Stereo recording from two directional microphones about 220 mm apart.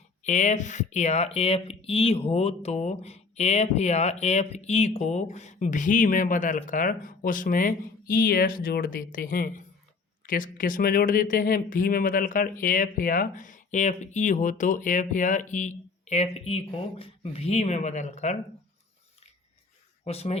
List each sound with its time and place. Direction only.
0.2 s speech: 30° left (ahead or behind)
20.1 s speech: 30° left (ahead or behind)